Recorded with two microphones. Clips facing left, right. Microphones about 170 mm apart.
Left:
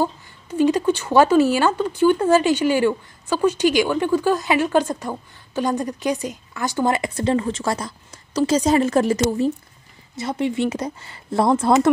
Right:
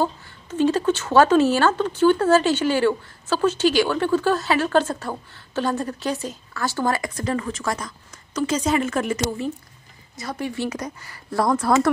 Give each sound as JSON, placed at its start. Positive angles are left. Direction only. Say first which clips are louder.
{"t": 0.0, "sound": "speech", "louder": "left 1 dB", "side_deg": 10}
{"t": 10.1, "sound": "speech", "louder": "left 6 dB", "side_deg": 25}